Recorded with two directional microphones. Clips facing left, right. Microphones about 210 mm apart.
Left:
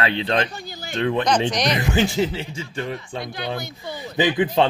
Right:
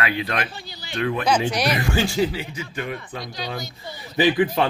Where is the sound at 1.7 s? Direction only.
20° left (ahead or behind).